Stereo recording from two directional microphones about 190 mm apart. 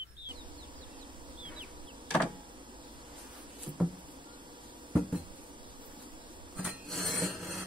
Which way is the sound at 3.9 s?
25° right (ahead or behind).